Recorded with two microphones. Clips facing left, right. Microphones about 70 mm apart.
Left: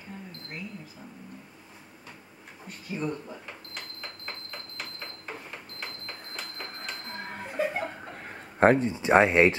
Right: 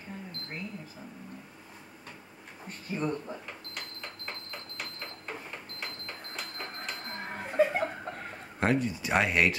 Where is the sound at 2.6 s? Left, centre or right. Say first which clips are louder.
Even; right.